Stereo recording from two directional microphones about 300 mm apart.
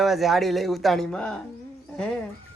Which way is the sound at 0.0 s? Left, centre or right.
Centre.